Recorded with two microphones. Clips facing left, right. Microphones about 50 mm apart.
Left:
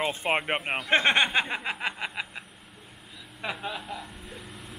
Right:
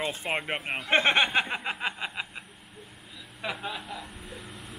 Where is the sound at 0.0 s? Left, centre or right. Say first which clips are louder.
Left 4 dB; centre.